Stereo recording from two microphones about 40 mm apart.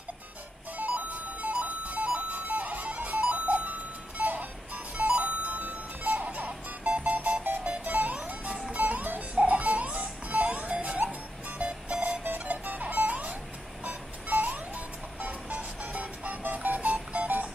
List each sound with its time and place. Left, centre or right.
0.7 s music: right